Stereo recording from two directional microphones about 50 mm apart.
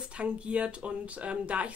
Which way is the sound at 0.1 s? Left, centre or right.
Right.